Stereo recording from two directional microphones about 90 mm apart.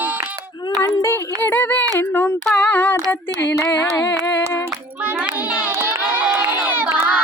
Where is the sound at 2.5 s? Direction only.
15° left (ahead or behind).